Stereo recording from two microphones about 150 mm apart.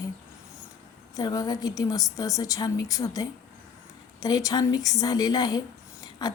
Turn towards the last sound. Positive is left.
turn(degrees=25)  # may be behind; listen again after turning